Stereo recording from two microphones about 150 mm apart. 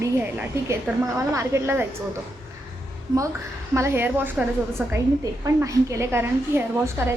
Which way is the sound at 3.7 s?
15° right (ahead or behind).